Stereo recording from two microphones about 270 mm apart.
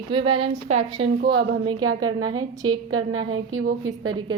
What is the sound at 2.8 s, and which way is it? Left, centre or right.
Speech, right.